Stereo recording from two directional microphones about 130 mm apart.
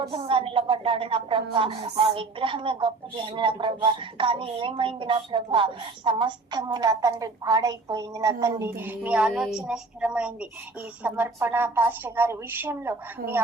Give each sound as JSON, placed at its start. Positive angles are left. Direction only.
{"t": 0.0, "sound": "a woman's voice", "side_deg": -45}